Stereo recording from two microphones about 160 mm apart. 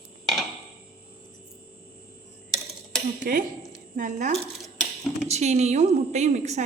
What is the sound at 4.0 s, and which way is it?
A woman's voice, 50° right (ahead or behind).